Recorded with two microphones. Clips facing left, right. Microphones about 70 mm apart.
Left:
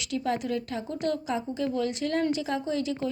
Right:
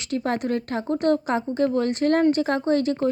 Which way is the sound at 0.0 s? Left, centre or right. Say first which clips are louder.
Right 4 dB; right.